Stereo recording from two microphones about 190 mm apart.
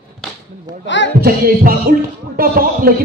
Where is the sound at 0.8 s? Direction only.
70° left (ahead or behind).